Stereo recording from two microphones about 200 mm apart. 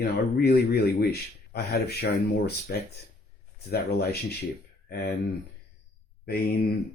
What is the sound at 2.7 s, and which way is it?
Speech, 50° left (ahead or behind).